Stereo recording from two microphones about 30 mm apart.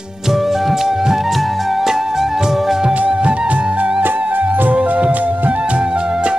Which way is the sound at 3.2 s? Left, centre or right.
Right.